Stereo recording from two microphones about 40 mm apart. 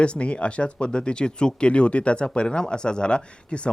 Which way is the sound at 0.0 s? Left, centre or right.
Left.